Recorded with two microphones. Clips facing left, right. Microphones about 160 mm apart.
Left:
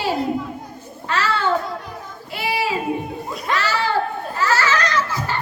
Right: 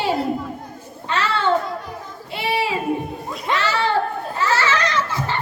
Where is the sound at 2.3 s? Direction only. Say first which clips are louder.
Right 1 dB; 25° right (ahead or behind).